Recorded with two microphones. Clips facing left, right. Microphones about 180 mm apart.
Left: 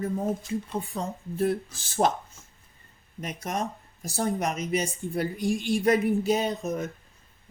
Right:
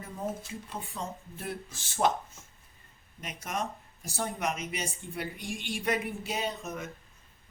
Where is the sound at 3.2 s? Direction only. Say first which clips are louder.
Left 4 dB; 40° left (ahead or behind).